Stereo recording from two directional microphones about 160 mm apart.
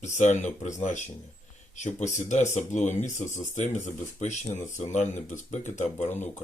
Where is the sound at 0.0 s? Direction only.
50° left (ahead or behind).